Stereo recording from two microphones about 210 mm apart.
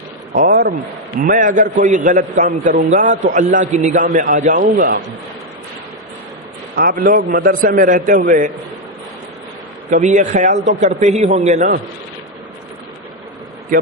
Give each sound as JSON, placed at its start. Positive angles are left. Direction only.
{"t": 0.3, "sound": "a man's voice", "side_deg": -45}
{"t": 7.3, "sound": "a man's voice", "side_deg": -45}
{"t": 9.9, "sound": "a man's voice", "side_deg": -35}